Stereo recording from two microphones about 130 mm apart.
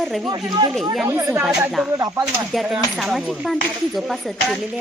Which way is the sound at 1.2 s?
20° right (ahead or behind).